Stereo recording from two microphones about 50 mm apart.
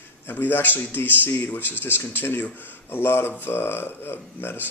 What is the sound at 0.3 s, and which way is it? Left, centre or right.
Speech, left.